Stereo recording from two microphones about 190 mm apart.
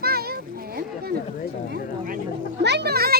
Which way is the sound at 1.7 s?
45° right (ahead or behind).